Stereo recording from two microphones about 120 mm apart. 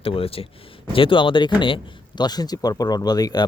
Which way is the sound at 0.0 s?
50° left (ahead or behind).